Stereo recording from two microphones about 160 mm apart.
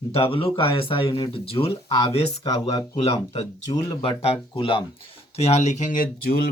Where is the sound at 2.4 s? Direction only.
25° left (ahead or behind).